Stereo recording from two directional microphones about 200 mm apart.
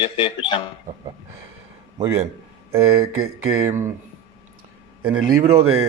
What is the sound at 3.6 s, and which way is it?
Speech, 15° right (ahead or behind).